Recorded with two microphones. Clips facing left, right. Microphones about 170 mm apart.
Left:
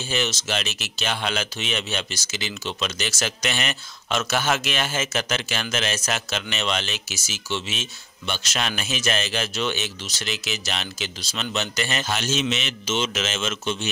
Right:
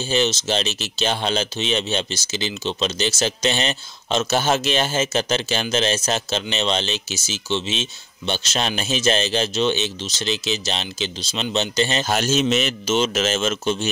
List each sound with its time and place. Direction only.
0.1 s speech: 30° right (ahead or behind)
12.1 s a man's voice: 40° right (ahead or behind)